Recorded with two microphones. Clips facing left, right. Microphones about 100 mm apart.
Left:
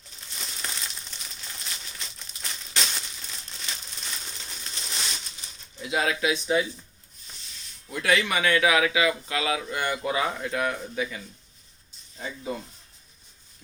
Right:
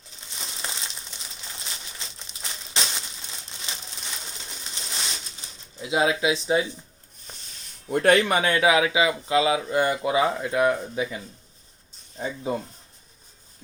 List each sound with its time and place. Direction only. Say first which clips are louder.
0.3 s crumpling: right 1 dB; 25° right (ahead or behind)
5.8 s speech: right 3 dB; 20° right (ahead or behind)
7.3 s rub: right 4 dB; 50° right (ahead or behind)
7.9 s speech: right 6 dB; 45° right (ahead or behind); by 10.0 s 30° right (ahead or behind)
10.0 s speech: right 5 dB; 20° right (ahead or behind)
12.4 s speech: right 5 dB; 30° right (ahead or behind)